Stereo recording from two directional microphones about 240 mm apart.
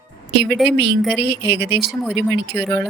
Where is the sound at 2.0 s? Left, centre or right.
Centre.